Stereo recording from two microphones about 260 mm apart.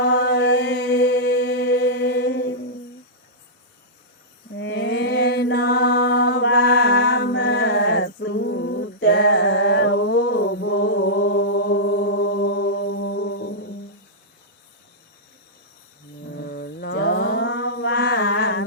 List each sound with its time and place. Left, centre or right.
0.0 s mantra: left
4.5 s mantra: left
13.1 s music: left
16.3 s mantra: left